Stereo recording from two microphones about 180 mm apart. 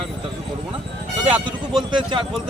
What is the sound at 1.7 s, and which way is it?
Speech, 25° right (ahead or behind).